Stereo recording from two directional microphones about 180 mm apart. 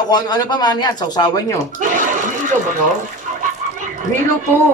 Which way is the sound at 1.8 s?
45° right (ahead or behind).